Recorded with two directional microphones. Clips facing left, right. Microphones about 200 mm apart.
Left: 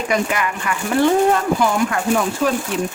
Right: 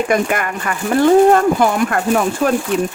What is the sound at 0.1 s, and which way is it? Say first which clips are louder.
Speech: right 3 dB; 50° right (ahead or behind).